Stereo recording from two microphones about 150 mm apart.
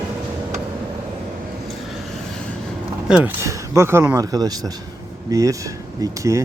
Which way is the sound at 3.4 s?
20° right (ahead or behind).